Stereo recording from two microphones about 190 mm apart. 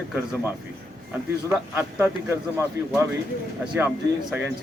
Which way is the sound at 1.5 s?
15° right (ahead or behind).